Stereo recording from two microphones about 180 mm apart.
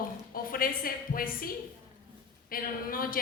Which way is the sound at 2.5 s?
55° left (ahead or behind).